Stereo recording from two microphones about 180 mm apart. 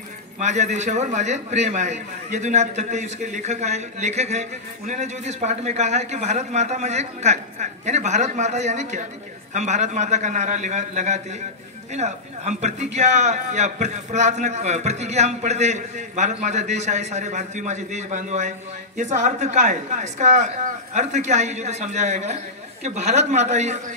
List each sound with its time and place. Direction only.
0.4 s a man's voice: 40° right (ahead or behind)